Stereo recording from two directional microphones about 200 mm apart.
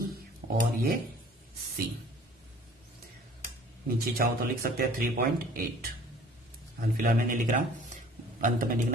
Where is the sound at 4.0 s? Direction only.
45° right (ahead or behind).